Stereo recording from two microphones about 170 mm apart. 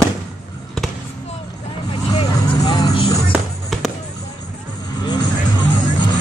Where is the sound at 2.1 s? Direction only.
25° left (ahead or behind).